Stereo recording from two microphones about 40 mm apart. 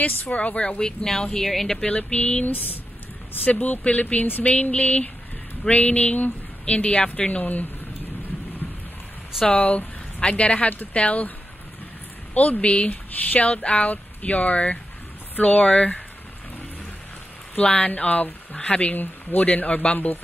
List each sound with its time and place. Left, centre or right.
0.0 s speech: left; by 1.8 s centre
2.0 s a sound: left
2.4 s speech: left
6.6 s speech: left
9.5 s speech: left
10.2 s speech: left
12.4 s speech: left
12.6 s speech: left
17.6 s speech: left